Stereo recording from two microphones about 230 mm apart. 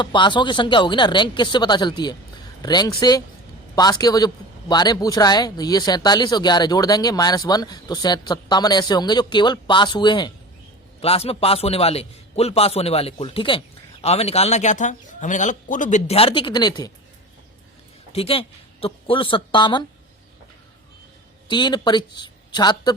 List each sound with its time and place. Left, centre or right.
0.0 s a man's voice: centre
18.1 s a man's voice: left
21.4 s a woman's voice: centre